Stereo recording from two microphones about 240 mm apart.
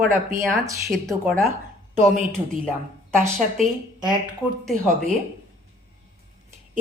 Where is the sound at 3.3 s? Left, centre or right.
Centre.